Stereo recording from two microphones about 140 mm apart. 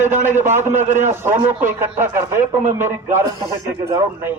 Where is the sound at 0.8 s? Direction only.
55° right (ahead or behind).